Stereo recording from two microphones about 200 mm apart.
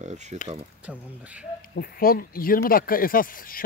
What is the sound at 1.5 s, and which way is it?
Speech, 45° left (ahead or behind).